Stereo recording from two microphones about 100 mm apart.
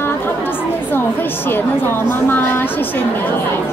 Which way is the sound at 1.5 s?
20° left (ahead or behind).